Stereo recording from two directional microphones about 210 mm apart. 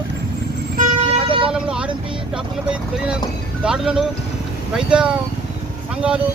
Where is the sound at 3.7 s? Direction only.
5° right (ahead or behind).